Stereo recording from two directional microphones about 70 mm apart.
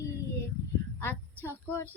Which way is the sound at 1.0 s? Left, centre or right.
Left.